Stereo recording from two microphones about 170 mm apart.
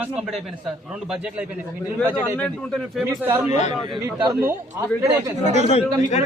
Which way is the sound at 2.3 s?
5° left (ahead or behind).